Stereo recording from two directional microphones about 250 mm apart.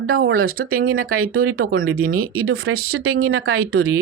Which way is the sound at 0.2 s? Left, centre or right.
Right.